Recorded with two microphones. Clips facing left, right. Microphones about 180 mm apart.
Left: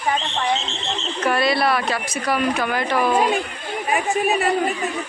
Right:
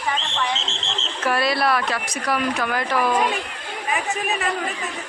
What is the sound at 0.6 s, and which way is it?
Alarm, 90° right.